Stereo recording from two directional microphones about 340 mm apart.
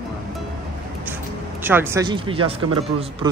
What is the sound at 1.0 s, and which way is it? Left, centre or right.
Speech, centre.